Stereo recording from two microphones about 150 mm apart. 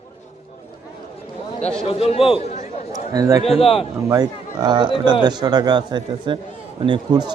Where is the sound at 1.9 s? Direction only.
40° left (ahead or behind).